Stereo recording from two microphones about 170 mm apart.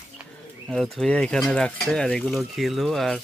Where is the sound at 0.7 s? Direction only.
Centre (ahead or behind).